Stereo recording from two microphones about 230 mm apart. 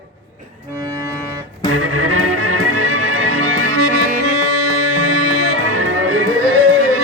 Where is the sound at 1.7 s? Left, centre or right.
Right.